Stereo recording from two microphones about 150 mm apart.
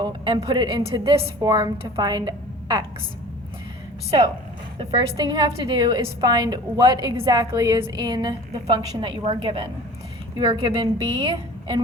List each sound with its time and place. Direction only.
0.0 s a woman's voice: 30° right (ahead or behind)
4.8 s a woman's voice: 35° right (ahead or behind)